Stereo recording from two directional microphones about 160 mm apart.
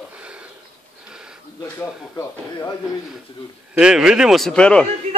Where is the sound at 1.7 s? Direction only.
15° left (ahead or behind).